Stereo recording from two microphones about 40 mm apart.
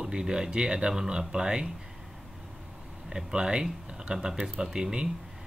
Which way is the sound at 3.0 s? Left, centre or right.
Centre.